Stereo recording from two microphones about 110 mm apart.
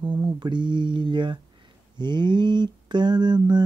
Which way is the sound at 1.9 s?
45° right (ahead or behind).